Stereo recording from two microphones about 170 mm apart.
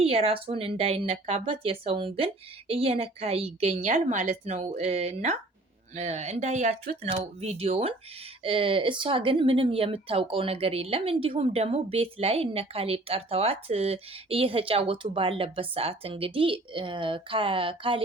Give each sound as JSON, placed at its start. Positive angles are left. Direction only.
{"t": 0.0, "sound": "speech", "side_deg": -35}